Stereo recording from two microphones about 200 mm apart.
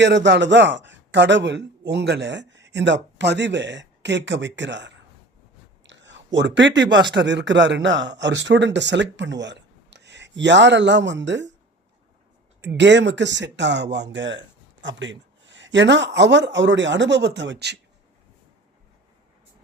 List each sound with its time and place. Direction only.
0.0 s speech: 60° right (ahead or behind)
5.8 s a sound: 65° right (ahead or behind)
7.1 s speech: 60° right (ahead or behind)
12.6 s speech: 60° right (ahead or behind)